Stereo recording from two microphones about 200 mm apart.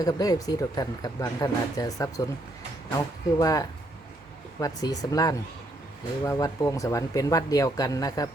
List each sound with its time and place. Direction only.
0.0 s speech: 20° left (ahead or behind)
3.3 s speech: 15° left (ahead or behind)